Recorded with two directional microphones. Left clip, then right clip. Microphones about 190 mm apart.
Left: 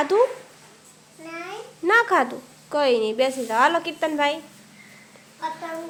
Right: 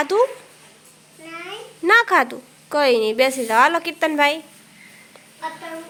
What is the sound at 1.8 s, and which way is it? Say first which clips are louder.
Speech: right 4 dB; 10° right (ahead or behind).